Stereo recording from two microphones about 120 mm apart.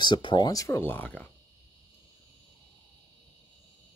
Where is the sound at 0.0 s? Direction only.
40° left (ahead or behind).